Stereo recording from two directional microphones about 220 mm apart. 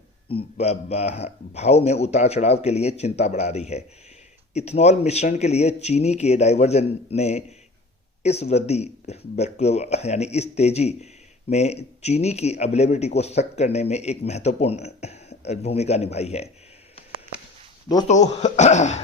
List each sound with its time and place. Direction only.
0.3 s speech: 25° left (ahead or behind)
18.1 s speech: 30° left (ahead or behind)